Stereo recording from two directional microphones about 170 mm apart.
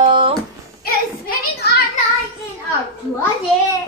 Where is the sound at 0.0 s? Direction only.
25° right (ahead or behind).